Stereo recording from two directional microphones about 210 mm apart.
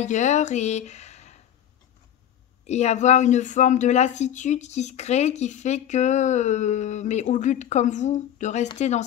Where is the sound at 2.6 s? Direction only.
30° left (ahead or behind).